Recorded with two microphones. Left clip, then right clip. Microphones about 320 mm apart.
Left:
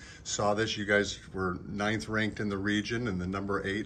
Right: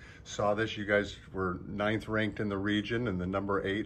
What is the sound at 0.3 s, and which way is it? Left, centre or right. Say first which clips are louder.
Speech: left 1 dB; centre.